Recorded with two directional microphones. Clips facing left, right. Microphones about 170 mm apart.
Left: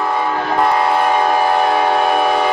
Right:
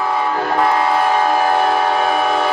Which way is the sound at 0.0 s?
Centre (ahead or behind).